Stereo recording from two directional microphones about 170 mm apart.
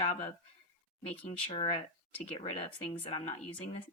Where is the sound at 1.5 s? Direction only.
35° left (ahead or behind).